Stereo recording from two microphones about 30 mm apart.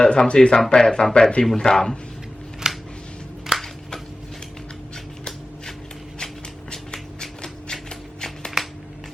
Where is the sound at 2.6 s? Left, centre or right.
Right.